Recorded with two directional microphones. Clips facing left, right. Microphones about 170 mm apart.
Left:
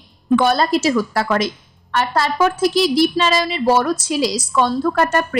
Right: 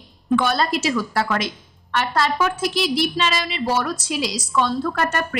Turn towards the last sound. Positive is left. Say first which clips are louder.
# left 5 dB
turn(degrees=40)  # may be behind; listen again after turning